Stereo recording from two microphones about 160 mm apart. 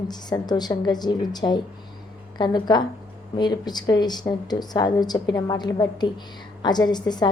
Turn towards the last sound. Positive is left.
turn(degrees=25)  # may be behind; listen again after turning